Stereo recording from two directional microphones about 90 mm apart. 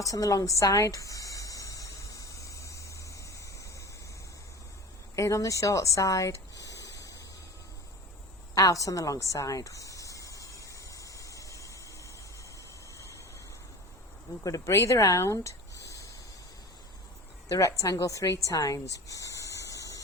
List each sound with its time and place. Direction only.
0.0 s music: 40° left (ahead or behind)
5.1 s a woman's voice: 35° left (ahead or behind)
8.5 s a sound: 40° left (ahead or behind)
14.4 s speech: 35° left (ahead or behind)
17.5 s a woman's voice: 40° left (ahead or behind)
18.4 s a sound: 40° left (ahead or behind)